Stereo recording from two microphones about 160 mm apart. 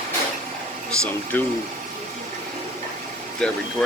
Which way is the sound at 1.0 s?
10° left (ahead or behind).